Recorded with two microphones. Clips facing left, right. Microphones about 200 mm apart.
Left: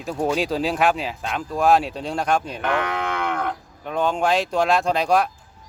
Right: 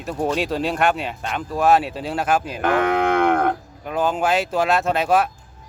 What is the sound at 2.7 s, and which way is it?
Cattle, 50° right (ahead or behind).